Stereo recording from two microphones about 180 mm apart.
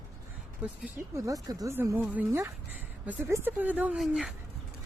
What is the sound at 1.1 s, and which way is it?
Speech, 20° right (ahead or behind).